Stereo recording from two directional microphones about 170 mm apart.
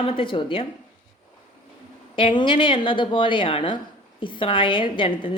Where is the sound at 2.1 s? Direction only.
30° left (ahead or behind).